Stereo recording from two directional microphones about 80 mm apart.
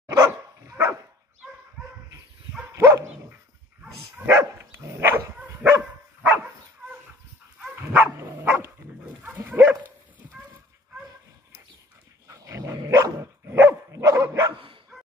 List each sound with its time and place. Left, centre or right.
0.1 s dog: right
2.7 s dog: right
4.3 s dog: right
5.4 s dog: centre
7.5 s dog: centre
8.2 s dog: right
12.3 s dog: right